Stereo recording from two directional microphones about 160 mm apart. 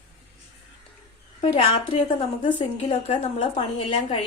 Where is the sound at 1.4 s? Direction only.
40° left (ahead or behind).